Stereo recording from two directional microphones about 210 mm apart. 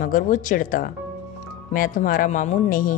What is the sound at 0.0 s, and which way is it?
Speech, 40° left (ahead or behind).